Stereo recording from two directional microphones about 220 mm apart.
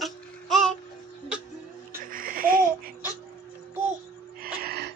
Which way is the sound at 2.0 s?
40° right (ahead or behind).